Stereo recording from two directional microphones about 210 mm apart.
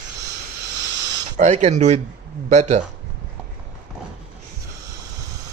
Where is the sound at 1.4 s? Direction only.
35° right (ahead or behind).